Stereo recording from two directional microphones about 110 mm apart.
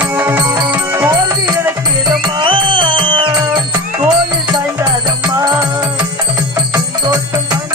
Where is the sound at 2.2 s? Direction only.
50° right (ahead or behind).